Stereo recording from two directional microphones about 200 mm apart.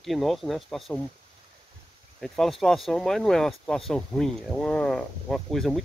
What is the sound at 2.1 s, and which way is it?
Speech, centre (ahead or behind).